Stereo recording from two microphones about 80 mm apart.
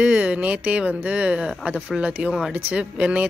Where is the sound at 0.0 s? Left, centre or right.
Centre.